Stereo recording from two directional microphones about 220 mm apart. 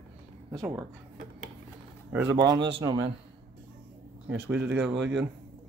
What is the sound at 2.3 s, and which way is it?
Speech, 20° right (ahead or behind).